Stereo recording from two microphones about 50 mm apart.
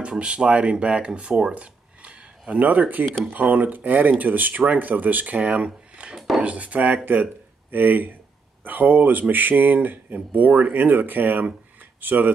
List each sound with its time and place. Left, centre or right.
0.0 s speech: right
6.1 s speech: centre
6.4 s speech: right